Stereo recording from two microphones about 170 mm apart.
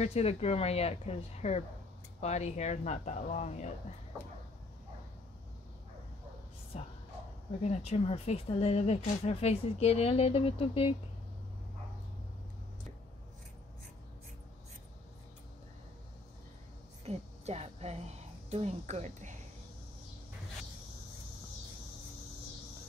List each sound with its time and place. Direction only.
0.0 s speech: 40° left (ahead or behind)
6.7 s speech: 40° left (ahead or behind)
17.0 s a woman's voice: 40° right (ahead or behind)